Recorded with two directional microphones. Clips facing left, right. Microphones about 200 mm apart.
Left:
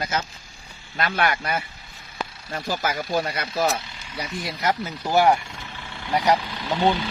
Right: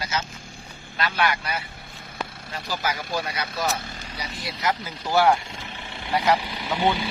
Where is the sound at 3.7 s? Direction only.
50° right (ahead or behind).